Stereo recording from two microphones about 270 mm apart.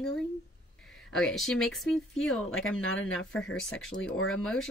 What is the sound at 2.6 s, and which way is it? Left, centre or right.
Speech, left.